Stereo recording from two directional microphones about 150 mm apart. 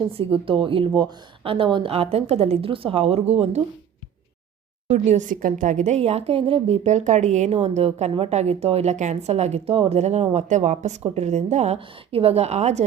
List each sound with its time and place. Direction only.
0.0 s a woman's voice: 40° right (ahead or behind)
4.9 s a woman's voice: 50° right (ahead or behind)